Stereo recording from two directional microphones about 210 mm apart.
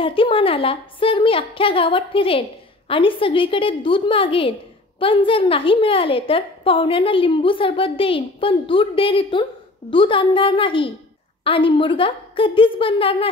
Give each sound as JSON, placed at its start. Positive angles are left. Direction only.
{"t": 0.0, "sound": "a woman's voice", "side_deg": 25}